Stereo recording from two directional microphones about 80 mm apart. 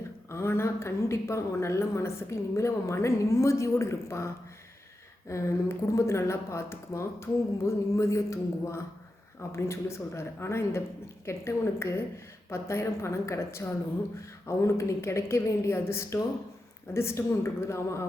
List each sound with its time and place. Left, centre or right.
0.3 s a woman's voice: left
5.3 s a woman's voice: left